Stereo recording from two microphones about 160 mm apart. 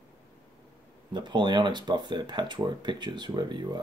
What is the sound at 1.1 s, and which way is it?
Speech, 30° right (ahead or behind).